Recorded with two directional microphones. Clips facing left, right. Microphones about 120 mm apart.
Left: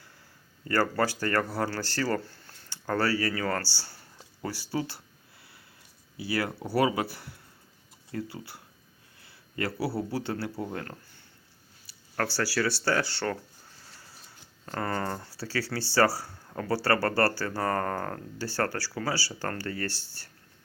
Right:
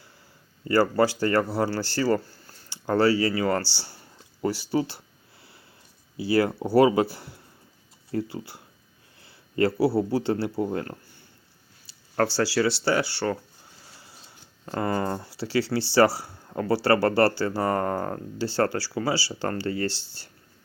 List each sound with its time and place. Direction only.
0.7 s speech: 10° right (ahead or behind)
2.2 s a sound: centre (ahead or behind)
2.6 s speech: 15° right (ahead or behind)
4.7 s speech: 25° right (ahead or behind)
6.1 s a man's voice: 25° right (ahead or behind)
11.9 s a sound: 25° right (ahead or behind)
12.4 s speech: 20° right (ahead or behind)
14.7 s speech: 15° right (ahead or behind)